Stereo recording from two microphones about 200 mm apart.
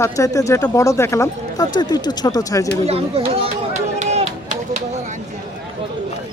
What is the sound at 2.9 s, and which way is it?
Speech, 30° right (ahead or behind).